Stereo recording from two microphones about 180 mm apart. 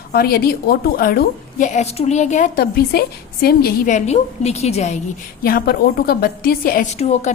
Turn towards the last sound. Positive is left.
turn(degrees=35)  # may be behind; listen again after turning